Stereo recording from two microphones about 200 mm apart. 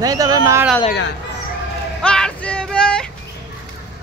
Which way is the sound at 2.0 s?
5° left (ahead or behind).